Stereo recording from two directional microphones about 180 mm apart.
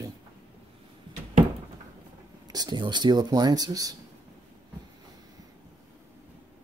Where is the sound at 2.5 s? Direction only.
20° right (ahead or behind).